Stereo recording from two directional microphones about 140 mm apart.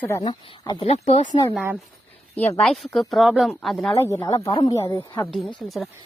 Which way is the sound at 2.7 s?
Centre (ahead or behind).